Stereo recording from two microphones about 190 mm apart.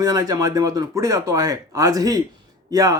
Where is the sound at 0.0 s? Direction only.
20° right (ahead or behind).